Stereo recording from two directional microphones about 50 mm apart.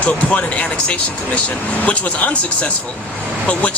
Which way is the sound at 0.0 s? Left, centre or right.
Left.